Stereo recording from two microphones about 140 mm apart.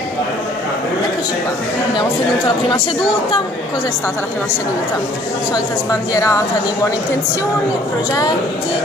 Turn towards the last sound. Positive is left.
turn(degrees=25)  # may be behind; listen again after turning